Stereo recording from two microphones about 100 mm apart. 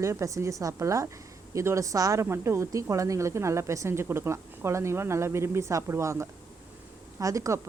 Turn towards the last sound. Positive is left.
turn(degrees=-30)  # may be behind; listen again after turning